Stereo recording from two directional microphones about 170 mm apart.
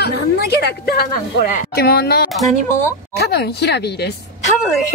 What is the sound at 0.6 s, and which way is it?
A woman's voice, 70° left (ahead or behind).